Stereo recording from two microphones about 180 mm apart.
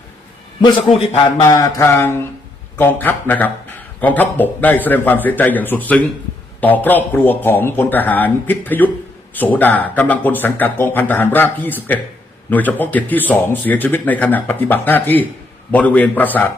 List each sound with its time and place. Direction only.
0.6 s a man's voice: 35° left (ahead or behind)
1.4 s speech: 20° left (ahead or behind)